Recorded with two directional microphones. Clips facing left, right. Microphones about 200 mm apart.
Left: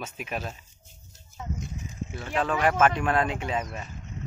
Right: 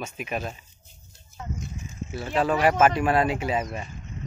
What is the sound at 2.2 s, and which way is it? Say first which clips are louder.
Speech: right 3 dB; 10° right (ahead or behind).